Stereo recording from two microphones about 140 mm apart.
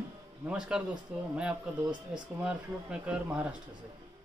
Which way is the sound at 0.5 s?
5° right (ahead or behind).